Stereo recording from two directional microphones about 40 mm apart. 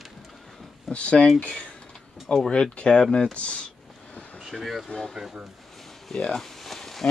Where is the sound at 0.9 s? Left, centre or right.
Left.